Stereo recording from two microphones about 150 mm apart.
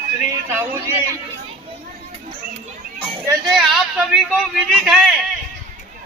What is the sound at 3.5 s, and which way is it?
A woman's voice, centre (ahead or behind).